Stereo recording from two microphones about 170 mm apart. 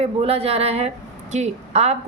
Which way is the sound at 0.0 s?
35° right (ahead or behind).